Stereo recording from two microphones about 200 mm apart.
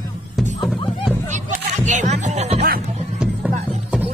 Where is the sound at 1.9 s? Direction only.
35° right (ahead or behind).